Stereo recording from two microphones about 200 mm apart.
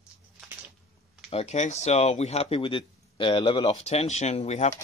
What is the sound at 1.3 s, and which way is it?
A man's voice, 30° left (ahead or behind).